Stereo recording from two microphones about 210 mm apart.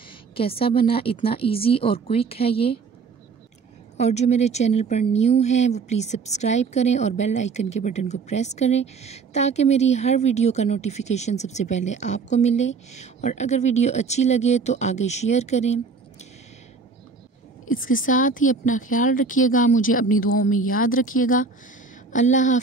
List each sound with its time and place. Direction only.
0.3 s a woman's voice: 25° left (ahead or behind)
3.9 s speech: 30° left (ahead or behind)
17.6 s speech: 40° left (ahead or behind)